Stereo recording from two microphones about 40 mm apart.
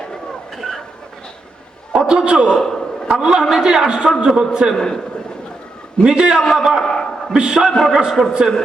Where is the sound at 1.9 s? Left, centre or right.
Centre.